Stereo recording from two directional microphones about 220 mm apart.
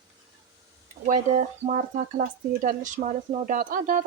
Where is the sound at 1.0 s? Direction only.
35° right (ahead or behind).